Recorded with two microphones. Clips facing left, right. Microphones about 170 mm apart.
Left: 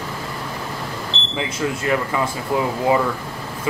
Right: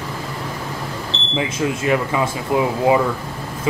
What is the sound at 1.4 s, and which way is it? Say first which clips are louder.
Speech: right 3 dB; 20° right (ahead or behind).